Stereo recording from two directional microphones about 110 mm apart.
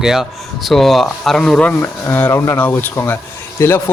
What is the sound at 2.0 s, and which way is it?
A man's voice, 20° left (ahead or behind).